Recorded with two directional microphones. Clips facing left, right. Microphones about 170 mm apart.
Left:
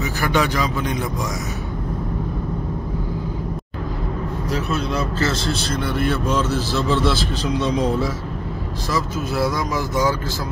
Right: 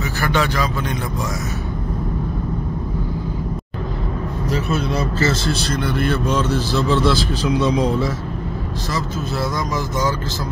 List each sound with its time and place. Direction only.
0.0 s speech: 15° left (ahead or behind)
4.5 s a man's voice: centre (ahead or behind)